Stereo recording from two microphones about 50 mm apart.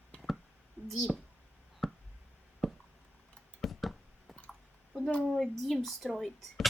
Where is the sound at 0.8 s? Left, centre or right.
Right.